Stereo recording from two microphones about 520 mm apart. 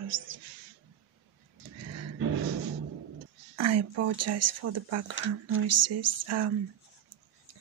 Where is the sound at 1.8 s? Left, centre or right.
Right.